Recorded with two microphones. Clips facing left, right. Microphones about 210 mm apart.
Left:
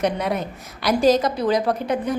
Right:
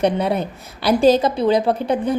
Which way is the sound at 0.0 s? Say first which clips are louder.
Right 4 dB; 30° right (ahead or behind).